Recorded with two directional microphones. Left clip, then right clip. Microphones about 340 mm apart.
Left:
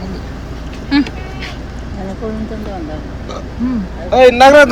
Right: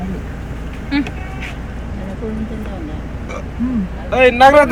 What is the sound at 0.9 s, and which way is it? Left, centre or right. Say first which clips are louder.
Duck: left 5 dB; centre.